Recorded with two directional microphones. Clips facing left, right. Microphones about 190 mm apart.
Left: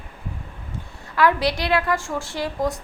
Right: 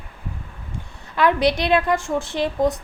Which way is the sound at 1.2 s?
20° right (ahead or behind).